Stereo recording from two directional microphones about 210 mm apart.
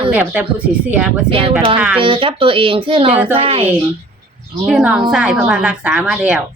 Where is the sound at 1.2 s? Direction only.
25° right (ahead or behind).